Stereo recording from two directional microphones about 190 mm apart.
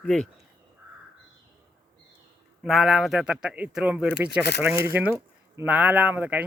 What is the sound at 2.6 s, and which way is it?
Speech, centre (ahead or behind).